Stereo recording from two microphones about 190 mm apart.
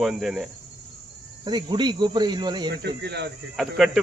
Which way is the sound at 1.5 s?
20° right (ahead or behind).